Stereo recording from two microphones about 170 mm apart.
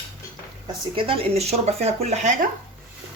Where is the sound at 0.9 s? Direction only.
30° right (ahead or behind).